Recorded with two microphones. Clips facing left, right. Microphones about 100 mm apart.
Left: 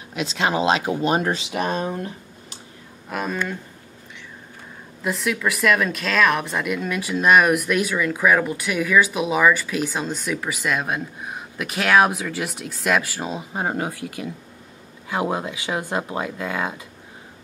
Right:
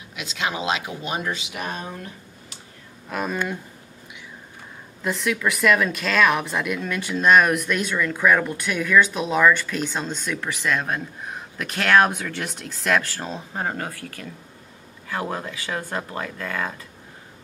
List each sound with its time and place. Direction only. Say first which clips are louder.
0.1 s speech: left 6 dB; 35° left (ahead or behind)
3.1 s speech: even; centre (ahead or behind)
5.0 s speech: even; centre (ahead or behind)